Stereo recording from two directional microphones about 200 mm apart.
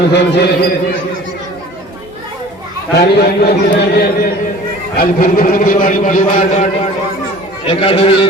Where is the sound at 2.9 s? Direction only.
55° left (ahead or behind).